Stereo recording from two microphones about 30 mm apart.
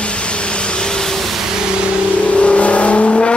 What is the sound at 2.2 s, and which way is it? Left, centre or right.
Vehicle, left.